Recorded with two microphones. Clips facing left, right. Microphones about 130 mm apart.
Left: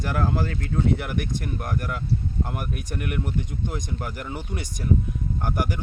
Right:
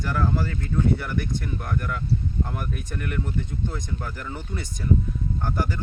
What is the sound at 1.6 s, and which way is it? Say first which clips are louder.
Speech: even; 30° left (ahead or behind).